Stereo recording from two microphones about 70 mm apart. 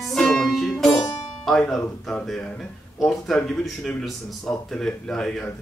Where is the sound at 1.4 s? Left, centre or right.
Centre.